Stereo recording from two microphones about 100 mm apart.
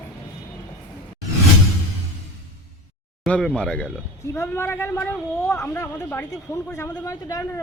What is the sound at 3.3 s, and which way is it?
Speech, 10° left (ahead or behind).